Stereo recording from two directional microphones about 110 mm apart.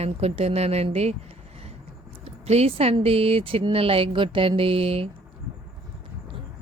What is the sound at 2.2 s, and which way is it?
Speech, 70° right (ahead or behind).